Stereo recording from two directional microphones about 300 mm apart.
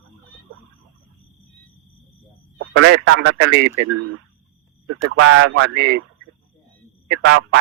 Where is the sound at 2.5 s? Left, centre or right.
Right.